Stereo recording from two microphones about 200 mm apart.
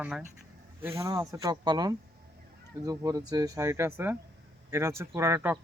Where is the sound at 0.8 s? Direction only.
15° right (ahead or behind).